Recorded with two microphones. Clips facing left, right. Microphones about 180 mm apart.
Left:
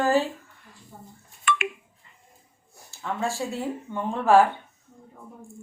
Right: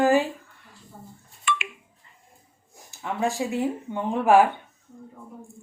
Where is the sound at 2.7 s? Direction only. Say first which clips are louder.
Even; 15° right (ahead or behind).